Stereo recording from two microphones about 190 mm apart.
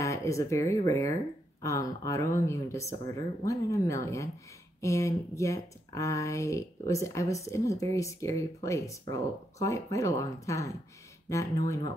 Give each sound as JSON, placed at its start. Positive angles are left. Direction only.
{"t": 0.0, "sound": "speech", "side_deg": 15}